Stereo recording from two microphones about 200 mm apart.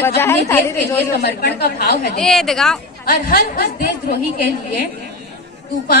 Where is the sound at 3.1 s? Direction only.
45° left (ahead or behind).